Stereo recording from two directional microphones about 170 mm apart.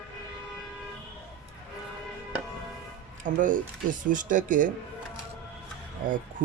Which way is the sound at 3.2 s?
50° right (ahead or behind).